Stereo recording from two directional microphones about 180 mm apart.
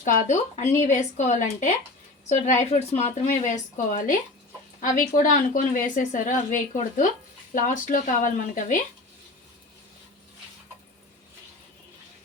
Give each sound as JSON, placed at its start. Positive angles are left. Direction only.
{"t": 0.0, "sound": "a woman's voice", "side_deg": 45}